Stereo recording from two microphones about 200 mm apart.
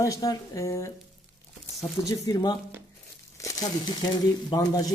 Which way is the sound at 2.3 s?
20° left (ahead or behind).